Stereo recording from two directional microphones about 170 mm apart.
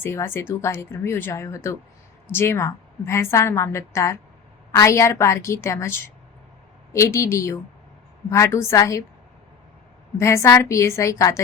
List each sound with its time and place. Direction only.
0.0 s a woman's voice: 15° left (ahead or behind)
10.2 s a woman's voice: 15° left (ahead or behind)